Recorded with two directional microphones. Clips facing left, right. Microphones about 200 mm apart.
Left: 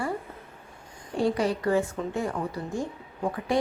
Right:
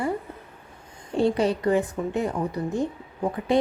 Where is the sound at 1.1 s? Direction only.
25° right (ahead or behind).